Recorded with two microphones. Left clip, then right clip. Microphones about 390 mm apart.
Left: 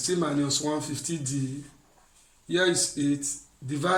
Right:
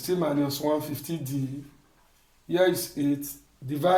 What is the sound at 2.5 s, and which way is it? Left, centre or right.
A man's voice, centre.